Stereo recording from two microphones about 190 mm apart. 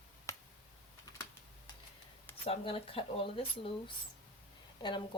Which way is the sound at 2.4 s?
30° left (ahead or behind).